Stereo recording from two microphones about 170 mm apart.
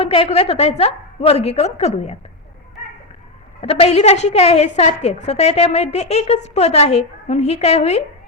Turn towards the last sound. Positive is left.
turn(degrees=40)  # may be behind; listen again after turning